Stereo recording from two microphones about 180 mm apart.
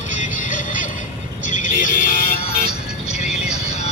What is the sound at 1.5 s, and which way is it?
Music, 45° left (ahead or behind).